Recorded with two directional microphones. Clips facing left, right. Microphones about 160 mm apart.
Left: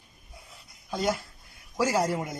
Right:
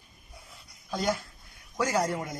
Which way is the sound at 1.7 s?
5° left (ahead or behind).